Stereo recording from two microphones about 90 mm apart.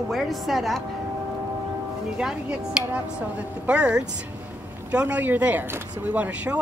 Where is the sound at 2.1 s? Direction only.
10° right (ahead or behind).